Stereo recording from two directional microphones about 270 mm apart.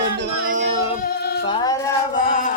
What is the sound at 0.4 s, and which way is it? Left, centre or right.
Music, right.